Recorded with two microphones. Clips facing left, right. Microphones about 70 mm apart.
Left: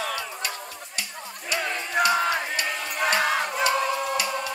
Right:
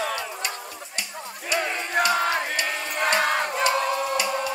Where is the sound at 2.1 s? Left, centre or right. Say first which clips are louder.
Right 1 dB; right.